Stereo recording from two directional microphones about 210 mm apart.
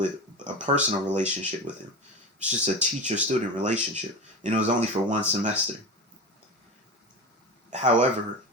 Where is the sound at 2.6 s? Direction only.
35° right (ahead or behind).